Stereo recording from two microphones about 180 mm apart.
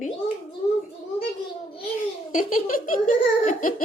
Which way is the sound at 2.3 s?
50° left (ahead or behind).